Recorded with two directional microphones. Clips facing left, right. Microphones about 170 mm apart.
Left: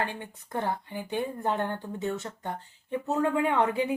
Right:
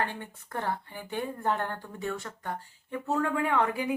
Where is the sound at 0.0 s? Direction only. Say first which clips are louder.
Even; 15° left (ahead or behind).